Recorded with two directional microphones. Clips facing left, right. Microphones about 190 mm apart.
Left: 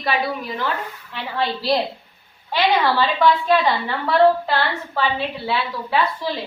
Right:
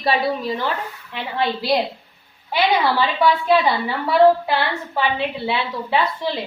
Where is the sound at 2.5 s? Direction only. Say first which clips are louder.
Even; 10° right (ahead or behind).